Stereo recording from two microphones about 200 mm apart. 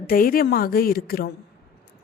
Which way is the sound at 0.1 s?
45° left (ahead or behind).